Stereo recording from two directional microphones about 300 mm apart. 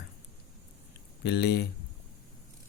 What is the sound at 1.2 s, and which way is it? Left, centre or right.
Speech, left.